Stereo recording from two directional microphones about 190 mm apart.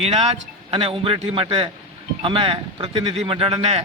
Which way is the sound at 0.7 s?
30° right (ahead or behind).